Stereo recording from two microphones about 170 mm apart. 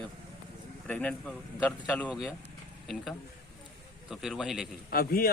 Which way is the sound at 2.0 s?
5° right (ahead or behind).